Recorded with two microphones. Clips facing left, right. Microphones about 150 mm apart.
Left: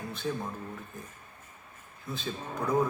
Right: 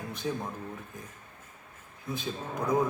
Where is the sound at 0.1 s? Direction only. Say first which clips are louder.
Right 1 dB; 15° right (ahead or behind).